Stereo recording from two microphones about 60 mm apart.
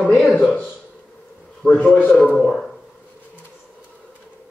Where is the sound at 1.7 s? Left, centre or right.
Left.